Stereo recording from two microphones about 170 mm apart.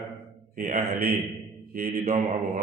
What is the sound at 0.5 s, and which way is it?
Speech, 45° right (ahead or behind).